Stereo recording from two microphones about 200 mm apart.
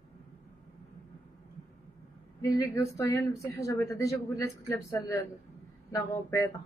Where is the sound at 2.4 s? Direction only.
15° left (ahead or behind).